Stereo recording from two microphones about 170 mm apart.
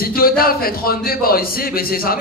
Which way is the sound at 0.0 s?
60° left (ahead or behind).